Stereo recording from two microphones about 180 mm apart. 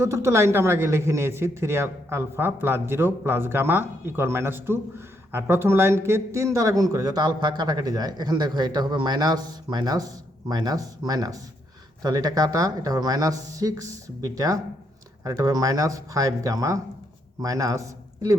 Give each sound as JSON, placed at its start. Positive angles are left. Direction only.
{"t": 0.0, "sound": "a man's voice", "side_deg": -15}